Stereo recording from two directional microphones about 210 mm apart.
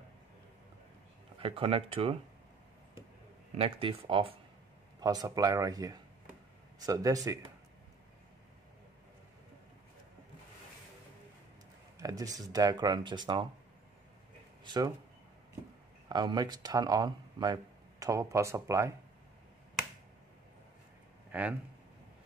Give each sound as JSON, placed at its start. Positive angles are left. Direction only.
{"t": 1.4, "sound": "speech", "side_deg": -25}
{"t": 3.5, "sound": "speech", "side_deg": -25}
{"t": 12.0, "sound": "speech", "side_deg": -15}
{"t": 14.6, "sound": "speech", "side_deg": -20}
{"t": 16.1, "sound": "speech", "side_deg": -20}
{"t": 21.3, "sound": "speech", "side_deg": -5}